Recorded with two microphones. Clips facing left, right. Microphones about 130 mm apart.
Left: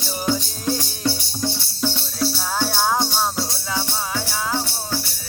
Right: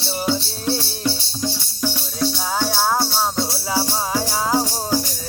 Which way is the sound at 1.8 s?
10° right (ahead or behind).